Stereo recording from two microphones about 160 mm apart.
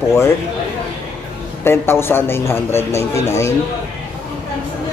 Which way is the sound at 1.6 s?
15° left (ahead or behind).